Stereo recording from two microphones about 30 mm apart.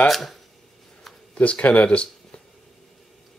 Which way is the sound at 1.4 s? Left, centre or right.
Left.